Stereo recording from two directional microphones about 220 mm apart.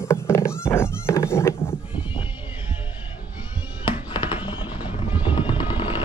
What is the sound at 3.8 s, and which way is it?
Music, 20° left (ahead or behind).